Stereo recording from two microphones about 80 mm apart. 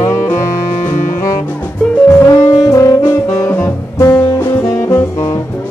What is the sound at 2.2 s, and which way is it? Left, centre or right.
Saxophone, left.